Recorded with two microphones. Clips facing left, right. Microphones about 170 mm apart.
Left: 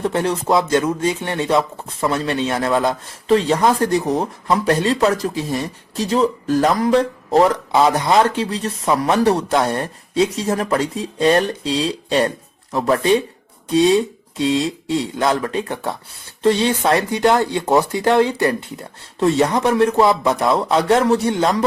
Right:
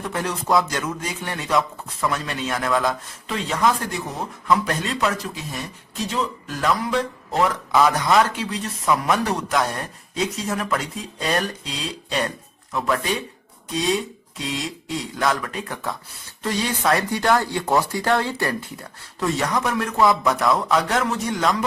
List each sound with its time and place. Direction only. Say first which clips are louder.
0.0 s speech: left 7 dB; 30° left (ahead or behind)